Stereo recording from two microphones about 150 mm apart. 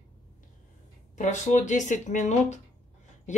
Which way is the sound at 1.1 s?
55° left (ahead or behind).